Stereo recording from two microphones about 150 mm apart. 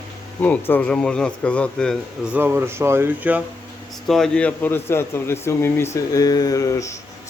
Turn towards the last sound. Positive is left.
turn(degrees=20)  # may be behind; listen again after turning